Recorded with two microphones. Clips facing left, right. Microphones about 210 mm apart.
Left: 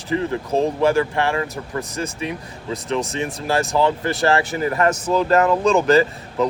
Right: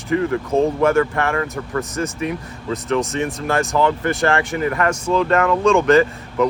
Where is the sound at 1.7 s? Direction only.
15° left (ahead or behind).